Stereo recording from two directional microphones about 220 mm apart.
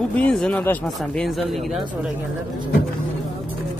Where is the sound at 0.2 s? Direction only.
5° left (ahead or behind).